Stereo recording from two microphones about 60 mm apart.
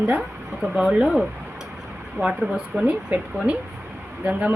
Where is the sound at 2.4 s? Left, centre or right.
Centre.